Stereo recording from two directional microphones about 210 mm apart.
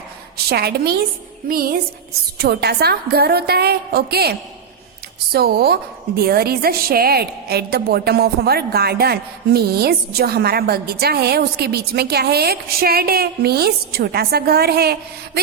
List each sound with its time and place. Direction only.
0.4 s a woman's voice: 50° right (ahead or behind)